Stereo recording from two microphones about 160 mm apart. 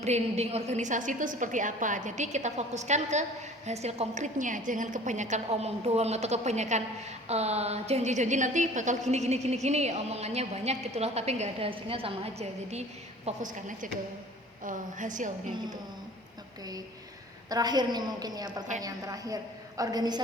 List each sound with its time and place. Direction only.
0.0 s a woman's voice: 45° right (ahead or behind)
13.2 s a woman's voice: 55° right (ahead or behind)
17.5 s a woman's voice: 25° right (ahead or behind)